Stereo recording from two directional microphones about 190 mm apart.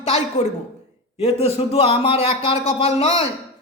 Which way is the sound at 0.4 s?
30° left (ahead or behind).